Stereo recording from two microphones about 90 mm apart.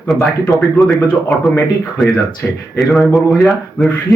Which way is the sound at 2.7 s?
Centre (ahead or behind).